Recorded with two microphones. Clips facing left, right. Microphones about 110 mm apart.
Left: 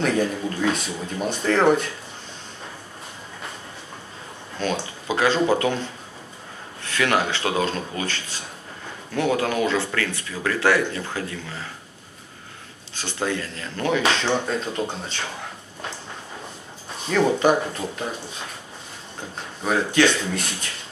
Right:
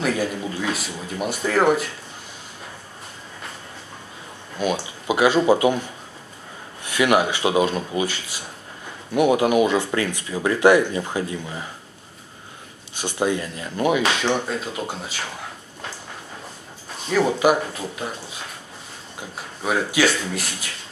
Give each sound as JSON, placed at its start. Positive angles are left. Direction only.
{"t": 0.0, "sound": "speech", "side_deg": -5}
{"t": 4.6, "sound": "speech", "side_deg": -15}
{"t": 12.9, "sound": "speech", "side_deg": -15}
{"t": 17.1, "sound": "speech", "side_deg": -10}
{"t": 19.3, "sound": "speech", "side_deg": -10}